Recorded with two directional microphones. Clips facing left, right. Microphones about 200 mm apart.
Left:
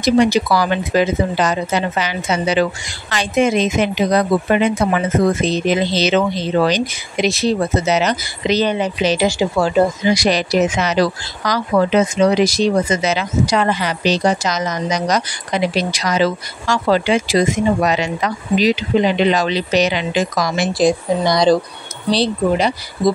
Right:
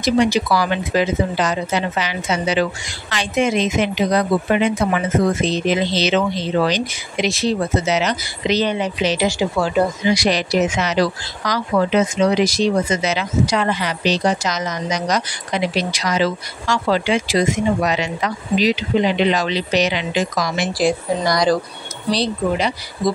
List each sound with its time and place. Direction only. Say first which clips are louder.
0.0 s speech: left 3 dB; 45° left (ahead or behind)
5.7 s a woman's voice: left 2 dB; 45° left (ahead or behind)
20.7 s speech: left 4 dB; 20° left (ahead or behind)